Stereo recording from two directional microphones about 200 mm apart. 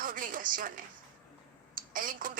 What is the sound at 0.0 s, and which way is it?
Speech, 45° right (ahead or behind).